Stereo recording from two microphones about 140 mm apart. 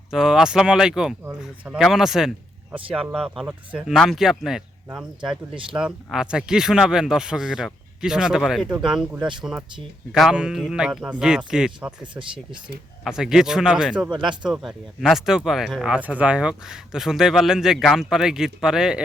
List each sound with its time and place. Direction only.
0.1 s speech: 5° right (ahead or behind)
12.1 s speech: 35° right (ahead or behind)
13.1 s speech: 5° right (ahead or behind)
14.1 s speech: 35° right (ahead or behind)
14.5 s speech: 5° right (ahead or behind)